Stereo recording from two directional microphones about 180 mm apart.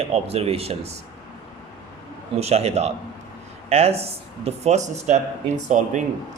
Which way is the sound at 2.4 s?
35° right (ahead or behind).